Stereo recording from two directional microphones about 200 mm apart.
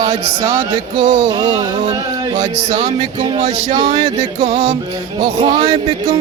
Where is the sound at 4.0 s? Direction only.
20° right (ahead or behind).